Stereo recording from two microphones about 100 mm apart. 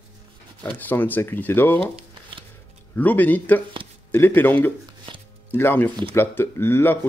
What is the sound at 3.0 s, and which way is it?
Speech, 15° left (ahead or behind).